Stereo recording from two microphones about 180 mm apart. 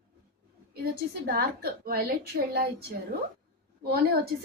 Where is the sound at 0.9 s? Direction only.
60° right (ahead or behind).